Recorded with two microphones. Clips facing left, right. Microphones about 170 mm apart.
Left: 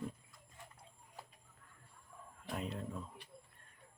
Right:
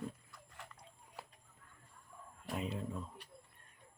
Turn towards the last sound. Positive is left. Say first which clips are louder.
# right 2 dB
turn(degrees=0)  # may be behind; listen again after turning